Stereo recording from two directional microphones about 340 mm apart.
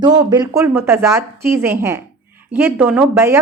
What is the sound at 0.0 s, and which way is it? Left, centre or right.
A woman's voice, centre.